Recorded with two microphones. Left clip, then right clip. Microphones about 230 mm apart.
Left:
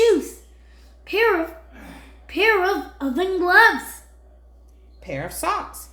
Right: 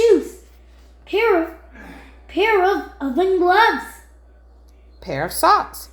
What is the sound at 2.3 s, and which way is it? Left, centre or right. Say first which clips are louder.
Speech: right 2 dB; centre.